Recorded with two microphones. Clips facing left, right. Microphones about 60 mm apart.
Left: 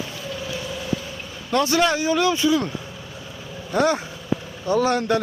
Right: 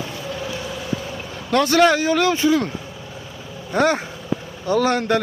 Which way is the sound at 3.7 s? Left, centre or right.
Right.